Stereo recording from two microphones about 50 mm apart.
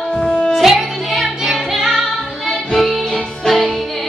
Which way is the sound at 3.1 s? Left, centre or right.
Centre.